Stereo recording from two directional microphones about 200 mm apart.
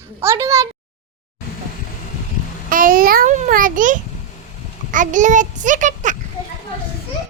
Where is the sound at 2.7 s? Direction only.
45° right (ahead or behind).